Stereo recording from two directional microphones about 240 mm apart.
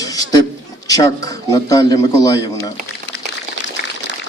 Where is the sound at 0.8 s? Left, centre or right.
Centre.